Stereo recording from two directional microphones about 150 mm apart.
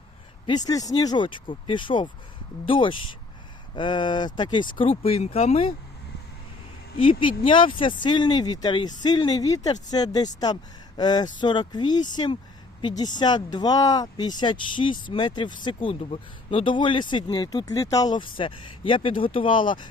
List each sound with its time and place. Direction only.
0.4 s speech: 25° left (ahead or behind)
7.0 s speech: 35° left (ahead or behind)